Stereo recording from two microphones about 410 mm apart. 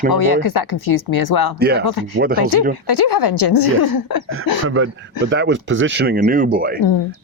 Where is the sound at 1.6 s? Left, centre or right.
Right.